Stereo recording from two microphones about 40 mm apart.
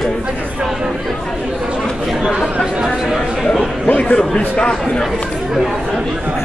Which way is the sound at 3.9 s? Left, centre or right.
Left.